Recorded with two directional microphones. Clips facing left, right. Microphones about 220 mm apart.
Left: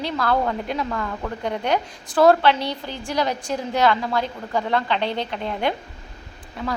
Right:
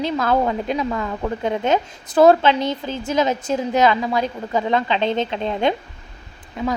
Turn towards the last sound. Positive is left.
turn(degrees=-20)  # may be behind; listen again after turning